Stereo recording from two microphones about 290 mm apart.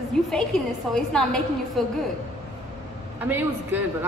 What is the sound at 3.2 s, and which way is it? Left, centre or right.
Speech, centre.